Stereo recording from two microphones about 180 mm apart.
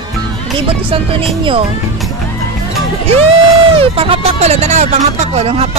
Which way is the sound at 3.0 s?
35° right (ahead or behind).